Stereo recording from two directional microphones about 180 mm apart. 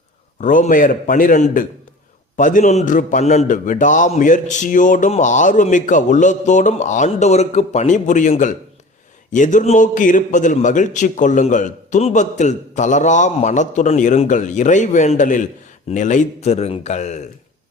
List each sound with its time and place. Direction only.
0.3 s a man's voice: 45° left (ahead or behind)